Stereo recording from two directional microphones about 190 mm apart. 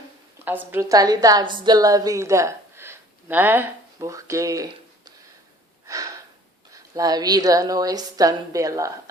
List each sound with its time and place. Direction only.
0.4 s a woman's voice: 10° right (ahead or behind)
5.9 s a sound: 20° right (ahead or behind)
6.7 s a woman's voice: 20° right (ahead or behind)